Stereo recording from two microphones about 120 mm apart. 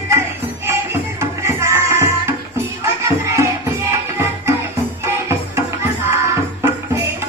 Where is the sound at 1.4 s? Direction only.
25° right (ahead or behind).